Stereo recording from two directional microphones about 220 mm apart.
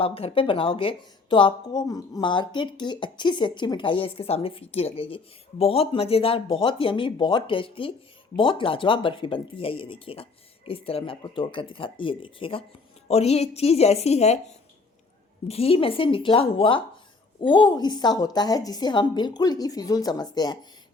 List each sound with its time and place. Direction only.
0.0 s speech: 25° left (ahead or behind)
15.4 s a woman's voice: 25° left (ahead or behind)